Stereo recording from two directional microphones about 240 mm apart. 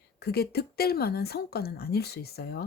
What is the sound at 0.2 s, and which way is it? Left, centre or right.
Speech, left.